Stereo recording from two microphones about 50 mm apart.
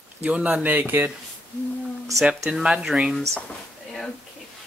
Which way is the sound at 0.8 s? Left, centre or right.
Right.